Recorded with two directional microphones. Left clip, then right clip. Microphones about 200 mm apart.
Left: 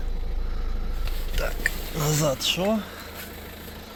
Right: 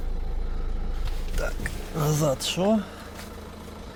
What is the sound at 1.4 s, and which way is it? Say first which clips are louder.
Whispering: left 5 dB; 10° right (ahead or behind).